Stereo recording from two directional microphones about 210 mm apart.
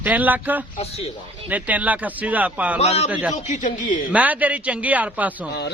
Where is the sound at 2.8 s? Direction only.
30° left (ahead or behind).